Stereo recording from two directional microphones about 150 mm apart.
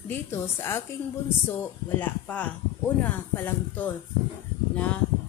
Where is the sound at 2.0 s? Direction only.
10° left (ahead or behind).